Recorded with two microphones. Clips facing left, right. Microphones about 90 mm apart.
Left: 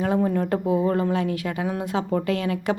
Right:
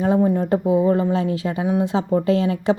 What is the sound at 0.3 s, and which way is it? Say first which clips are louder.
Speech: right 4 dB; 25° right (ahead or behind).